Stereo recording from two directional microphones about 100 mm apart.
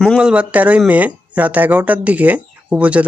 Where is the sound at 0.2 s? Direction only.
10° right (ahead or behind).